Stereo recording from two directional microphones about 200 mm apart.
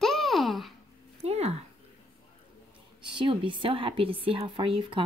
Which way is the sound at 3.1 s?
25° right (ahead or behind).